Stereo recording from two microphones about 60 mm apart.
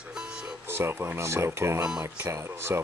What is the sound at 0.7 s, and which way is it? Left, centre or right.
Speech, right.